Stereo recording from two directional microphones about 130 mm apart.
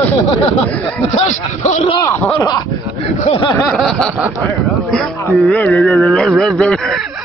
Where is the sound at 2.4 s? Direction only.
30° left (ahead or behind).